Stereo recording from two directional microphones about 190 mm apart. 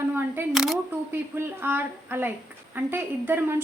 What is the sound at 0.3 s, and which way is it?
A woman's voice, 5° right (ahead or behind).